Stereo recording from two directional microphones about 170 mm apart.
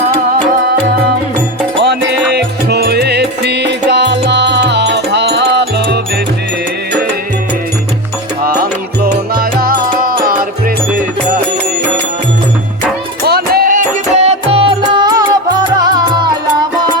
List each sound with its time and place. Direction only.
1.8 s music: 80° right
9.3 s music: 60° right (ahead or behind)
13.2 s music: 65° right (ahead or behind); by 16.3 s 25° right (ahead or behind)